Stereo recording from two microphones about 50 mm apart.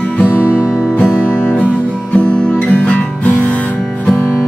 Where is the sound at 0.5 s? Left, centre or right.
Left.